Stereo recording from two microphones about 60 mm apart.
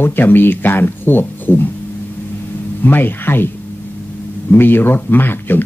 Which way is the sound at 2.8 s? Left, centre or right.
Left.